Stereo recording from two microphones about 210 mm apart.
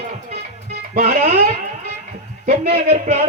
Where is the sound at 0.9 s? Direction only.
45° right (ahead or behind).